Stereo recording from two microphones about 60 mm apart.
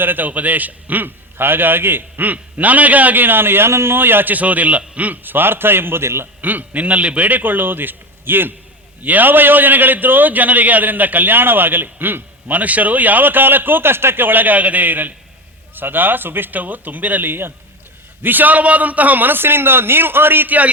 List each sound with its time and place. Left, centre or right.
0.0 s a man's voice: right
6.4 s a man's voice: right